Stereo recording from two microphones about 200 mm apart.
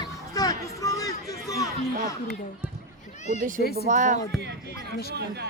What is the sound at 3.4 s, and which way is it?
Speech, 40° right (ahead or behind).